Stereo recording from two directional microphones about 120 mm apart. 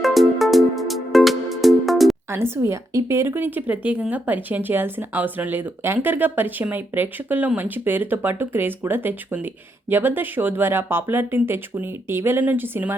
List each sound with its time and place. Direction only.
0.0 s music: centre (ahead or behind)
2.3 s speech: 20° right (ahead or behind)